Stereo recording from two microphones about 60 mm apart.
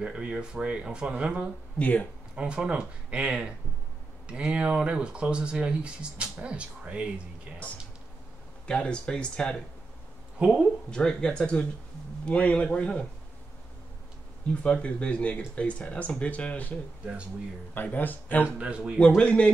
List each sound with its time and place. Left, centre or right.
0.0 s speech: centre
1.8 s speech: left
2.3 s speech: centre
8.6 s speech: centre
10.4 s speech: centre
10.9 s speech: centre
14.5 s speech: centre
17.0 s speech: centre
17.9 s speech: left
18.4 s speech: centre
18.9 s speech: centre